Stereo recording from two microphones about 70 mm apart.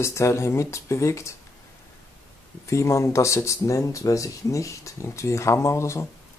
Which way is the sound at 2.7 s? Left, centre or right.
Left.